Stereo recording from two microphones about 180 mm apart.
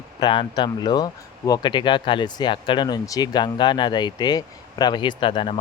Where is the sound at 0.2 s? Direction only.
25° left (ahead or behind).